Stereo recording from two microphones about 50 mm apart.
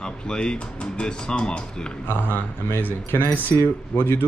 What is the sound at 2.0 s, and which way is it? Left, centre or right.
Speech, left.